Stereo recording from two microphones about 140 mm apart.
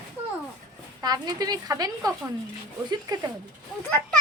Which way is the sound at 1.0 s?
30° right (ahead or behind).